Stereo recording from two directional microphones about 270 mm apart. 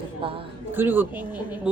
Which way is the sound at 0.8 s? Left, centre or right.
Centre.